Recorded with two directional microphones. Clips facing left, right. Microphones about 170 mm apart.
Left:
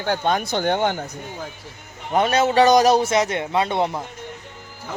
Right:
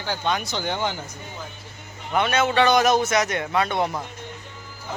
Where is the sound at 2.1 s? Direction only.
35° left (ahead or behind).